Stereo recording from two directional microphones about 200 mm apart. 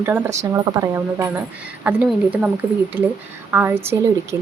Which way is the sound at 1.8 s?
5° right (ahead or behind).